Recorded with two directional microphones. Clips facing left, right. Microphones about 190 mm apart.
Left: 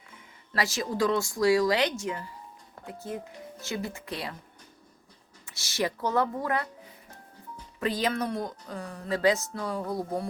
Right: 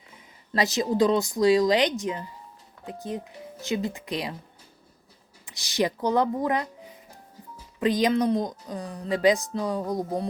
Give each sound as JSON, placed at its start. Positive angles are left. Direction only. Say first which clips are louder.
{"t": 0.1, "sound": "speech", "louder": "right 6 dB", "side_deg": -20}
{"t": 5.5, "sound": "speech", "louder": "right 4 dB", "side_deg": -15}
{"t": 7.8, "sound": "speech", "louder": "right 6 dB", "side_deg": -15}